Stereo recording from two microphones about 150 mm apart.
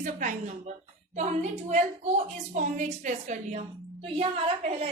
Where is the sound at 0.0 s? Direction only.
55° right (ahead or behind).